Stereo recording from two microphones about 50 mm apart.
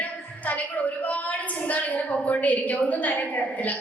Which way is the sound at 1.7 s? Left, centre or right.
Left.